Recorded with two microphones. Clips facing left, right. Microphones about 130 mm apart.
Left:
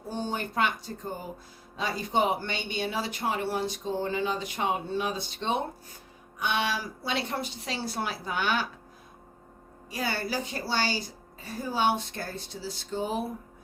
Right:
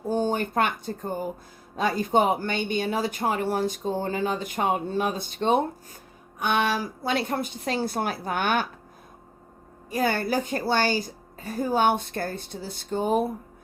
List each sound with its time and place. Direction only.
0.1 s speech: 45° right (ahead or behind)
9.9 s speech: 50° right (ahead or behind)